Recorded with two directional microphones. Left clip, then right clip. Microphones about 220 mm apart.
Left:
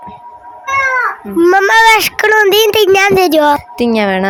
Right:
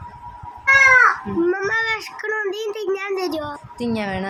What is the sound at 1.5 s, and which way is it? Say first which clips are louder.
Speech: left 16 dB; 45° left (ahead or behind).